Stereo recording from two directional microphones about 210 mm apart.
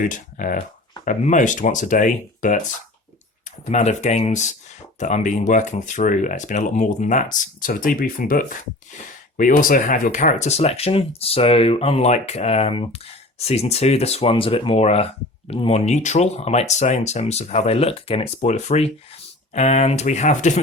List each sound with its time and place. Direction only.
0.0 s speech: 40° left (ahead or behind)
3.7 s speech: 30° left (ahead or behind)